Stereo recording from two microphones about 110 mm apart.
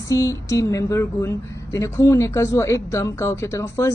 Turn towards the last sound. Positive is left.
turn(degrees=25)  # may be behind; listen again after turning